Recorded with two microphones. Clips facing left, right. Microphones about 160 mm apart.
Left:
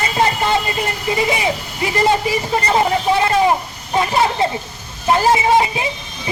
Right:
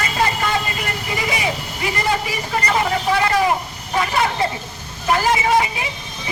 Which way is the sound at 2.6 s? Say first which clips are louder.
Left 3 dB; 25° left (ahead or behind).